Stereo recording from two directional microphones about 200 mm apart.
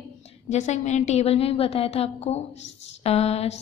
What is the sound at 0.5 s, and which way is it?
A woman's voice, 35° left (ahead or behind).